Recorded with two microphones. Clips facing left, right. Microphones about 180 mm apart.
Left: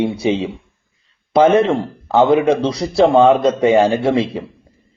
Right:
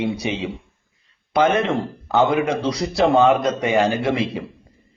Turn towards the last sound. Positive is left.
turn(degrees=30)  # may be behind; listen again after turning